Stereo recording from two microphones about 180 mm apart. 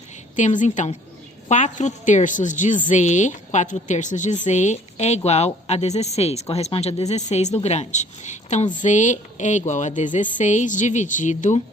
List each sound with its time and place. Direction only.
0.3 s a woman's voice: 45° left (ahead or behind)